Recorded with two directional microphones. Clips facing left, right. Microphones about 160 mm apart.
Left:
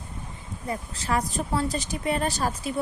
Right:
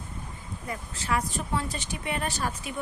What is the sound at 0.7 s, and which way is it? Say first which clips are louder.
A woman's voice: left 3 dB; 35° left (ahead or behind).